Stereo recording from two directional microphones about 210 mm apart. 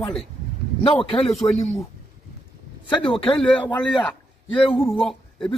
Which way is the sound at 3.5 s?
5° left (ahead or behind).